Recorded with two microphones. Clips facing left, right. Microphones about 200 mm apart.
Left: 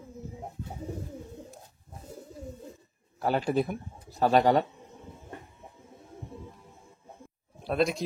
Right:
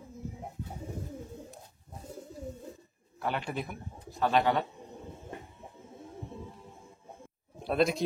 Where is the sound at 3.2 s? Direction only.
35° left (ahead or behind).